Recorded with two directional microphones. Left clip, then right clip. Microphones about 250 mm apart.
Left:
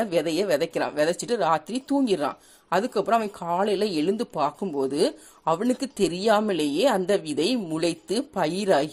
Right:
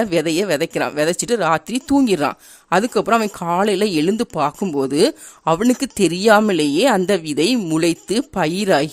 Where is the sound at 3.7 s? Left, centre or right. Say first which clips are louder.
Right 7 dB; right.